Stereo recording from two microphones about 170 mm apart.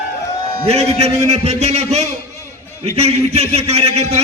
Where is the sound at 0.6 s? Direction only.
40° right (ahead or behind).